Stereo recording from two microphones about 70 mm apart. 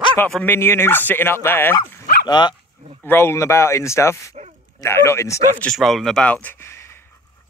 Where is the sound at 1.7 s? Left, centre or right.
Left.